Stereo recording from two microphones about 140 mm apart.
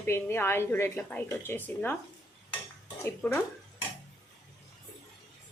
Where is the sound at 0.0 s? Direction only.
15° left (ahead or behind).